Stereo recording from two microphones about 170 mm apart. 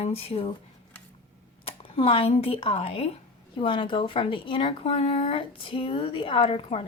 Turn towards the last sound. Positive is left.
turn(degrees=35)  # may be behind; listen again after turning